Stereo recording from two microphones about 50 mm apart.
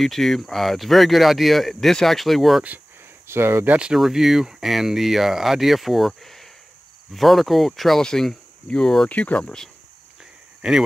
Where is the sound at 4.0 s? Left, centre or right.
Centre.